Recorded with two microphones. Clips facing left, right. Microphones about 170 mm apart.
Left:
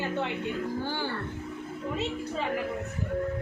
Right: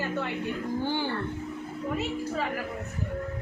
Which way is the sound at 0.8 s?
15° right (ahead or behind).